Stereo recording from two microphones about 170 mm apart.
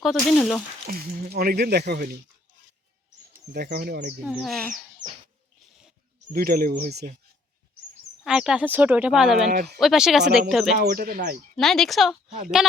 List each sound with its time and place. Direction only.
0.0 s speech: centre (ahead or behind)
0.9 s speech: 55° right (ahead or behind); by 2.0 s 75° right (ahead or behind)
3.5 s speech: 65° right (ahead or behind)
4.2 s speech: 5° right (ahead or behind)
6.3 s speech: 60° right (ahead or behind)
8.2 s speech: 5° right (ahead or behind)
10.8 s speech: 60° right (ahead or behind)
11.5 s speech: 5° left (ahead or behind)